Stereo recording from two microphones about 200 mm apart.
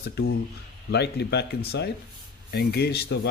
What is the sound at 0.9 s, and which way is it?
Speech, 55° left (ahead or behind).